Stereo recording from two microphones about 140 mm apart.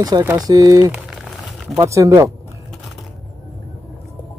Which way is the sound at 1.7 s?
20° right (ahead or behind).